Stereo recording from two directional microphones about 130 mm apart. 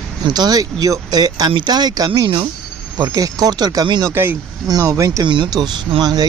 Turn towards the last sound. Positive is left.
turn(degrees=-30)  # may be behind; listen again after turning